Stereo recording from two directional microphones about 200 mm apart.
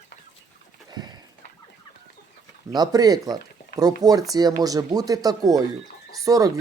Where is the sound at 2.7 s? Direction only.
20° right (ahead or behind).